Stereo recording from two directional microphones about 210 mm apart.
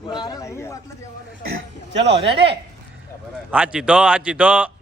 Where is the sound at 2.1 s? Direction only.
25° right (ahead or behind).